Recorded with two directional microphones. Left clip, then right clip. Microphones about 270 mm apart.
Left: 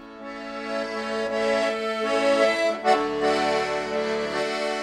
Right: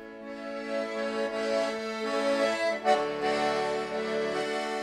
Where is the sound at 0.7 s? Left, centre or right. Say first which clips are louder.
Left 3 dB; left.